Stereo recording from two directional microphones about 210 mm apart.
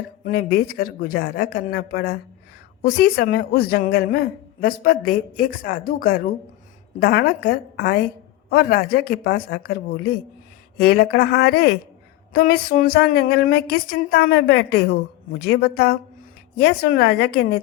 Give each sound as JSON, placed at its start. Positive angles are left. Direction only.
{"t": 0.3, "sound": "a woman's voice", "side_deg": 45}